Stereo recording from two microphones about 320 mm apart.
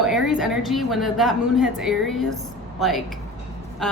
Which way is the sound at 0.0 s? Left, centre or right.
Centre.